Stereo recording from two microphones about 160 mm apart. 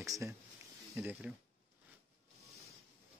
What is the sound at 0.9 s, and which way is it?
Speech, 10° right (ahead or behind).